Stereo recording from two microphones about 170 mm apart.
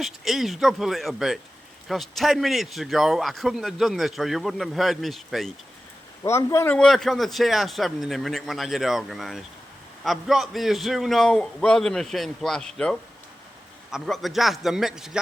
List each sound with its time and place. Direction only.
0.0 s a man's voice: centre (ahead or behind)
6.2 s a man's voice: 15° left (ahead or behind)
6.7 s a man's voice: 5° left (ahead or behind)